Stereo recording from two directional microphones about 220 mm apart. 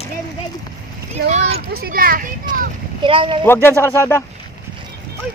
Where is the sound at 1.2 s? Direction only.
50° right (ahead or behind).